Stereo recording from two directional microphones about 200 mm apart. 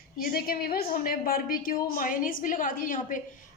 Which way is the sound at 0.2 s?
45° left (ahead or behind).